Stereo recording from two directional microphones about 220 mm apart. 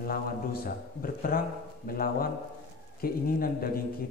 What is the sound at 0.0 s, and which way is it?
Speech, 40° left (ahead or behind).